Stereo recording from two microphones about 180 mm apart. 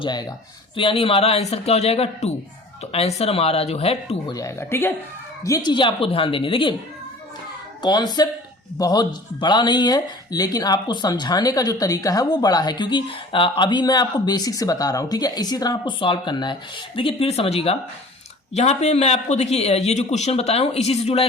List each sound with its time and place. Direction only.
0.0 s a man's voice: 25° left (ahead or behind)
4.3 s speech: 20° left (ahead or behind)
7.8 s a man's voice: 20° left (ahead or behind)